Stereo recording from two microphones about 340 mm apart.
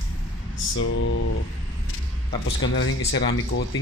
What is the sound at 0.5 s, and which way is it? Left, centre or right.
Speech, left.